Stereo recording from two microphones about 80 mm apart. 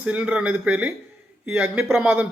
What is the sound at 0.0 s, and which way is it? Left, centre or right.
Speech, centre.